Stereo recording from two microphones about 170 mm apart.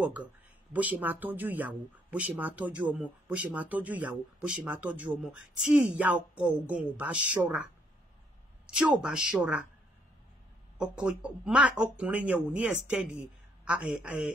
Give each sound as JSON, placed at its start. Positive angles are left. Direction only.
{"t": 0.0, "sound": "speech", "side_deg": -10}
{"t": 8.6, "sound": "speech", "side_deg": -5}
{"t": 10.8, "sound": "speech", "side_deg": -5}